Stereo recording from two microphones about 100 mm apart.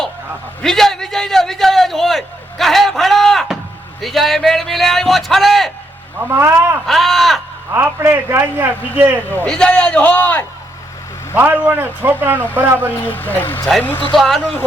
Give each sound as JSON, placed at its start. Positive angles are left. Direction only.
{"t": 0.6, "sound": "a sound", "side_deg": 5}
{"t": 4.0, "sound": "a man's voice", "side_deg": 0}
{"t": 6.1, "sound": "a man's voice", "side_deg": -20}
{"t": 6.8, "sound": "a man's voice", "side_deg": 0}
{"t": 7.7, "sound": "a man's voice", "side_deg": -25}
{"t": 9.5, "sound": "a man's voice", "side_deg": 10}
{"t": 11.3, "sound": "a man's voice", "side_deg": -15}
{"t": 12.9, "sound": "speech", "side_deg": 20}
{"t": 14.2, "sound": "a man's voice", "side_deg": 0}